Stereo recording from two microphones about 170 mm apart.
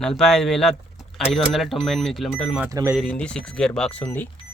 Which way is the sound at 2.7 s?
20° right (ahead or behind).